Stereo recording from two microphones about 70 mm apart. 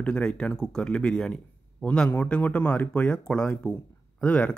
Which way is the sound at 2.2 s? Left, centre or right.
Centre.